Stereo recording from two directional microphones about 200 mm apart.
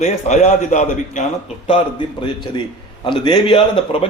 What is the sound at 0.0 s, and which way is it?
A man's voice, 35° left (ahead or behind).